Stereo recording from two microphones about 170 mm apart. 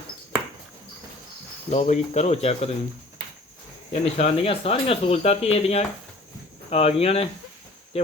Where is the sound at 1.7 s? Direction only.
40° left (ahead or behind).